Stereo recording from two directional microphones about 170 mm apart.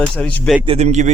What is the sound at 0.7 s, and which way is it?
Speech, 40° right (ahead or behind).